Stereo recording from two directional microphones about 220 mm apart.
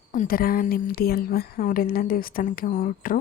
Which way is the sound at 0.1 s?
40° left (ahead or behind).